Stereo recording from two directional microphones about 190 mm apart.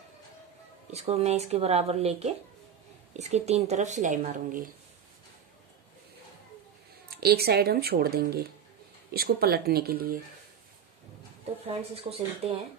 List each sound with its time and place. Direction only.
0.9 s speech: 35° right (ahead or behind)
7.1 s speech: 55° right (ahead or behind)
11.6 s speech: 30° right (ahead or behind)